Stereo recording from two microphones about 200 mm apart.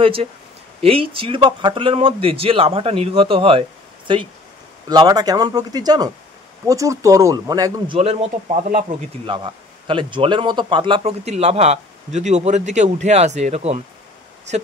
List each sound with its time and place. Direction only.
0.0 s speech: 25° right (ahead or behind)
7.9 s speech: 30° right (ahead or behind)
9.2 s speech: 25° right (ahead or behind)